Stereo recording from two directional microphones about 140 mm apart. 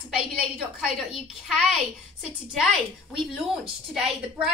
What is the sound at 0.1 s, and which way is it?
Speech, 5° right (ahead or behind).